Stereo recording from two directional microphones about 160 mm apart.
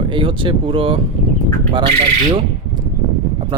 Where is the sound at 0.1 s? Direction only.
30° right (ahead or behind).